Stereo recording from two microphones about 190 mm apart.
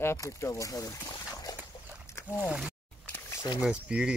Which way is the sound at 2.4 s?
5° right (ahead or behind).